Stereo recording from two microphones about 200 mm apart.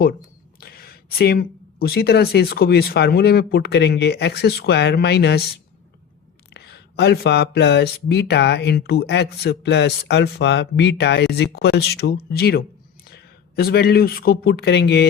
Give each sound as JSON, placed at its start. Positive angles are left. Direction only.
{"t": 0.6, "sound": "speech", "side_deg": 50}
{"t": 6.5, "sound": "speech", "side_deg": 55}